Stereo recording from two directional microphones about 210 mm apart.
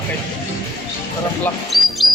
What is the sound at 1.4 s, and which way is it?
Music, centre (ahead or behind).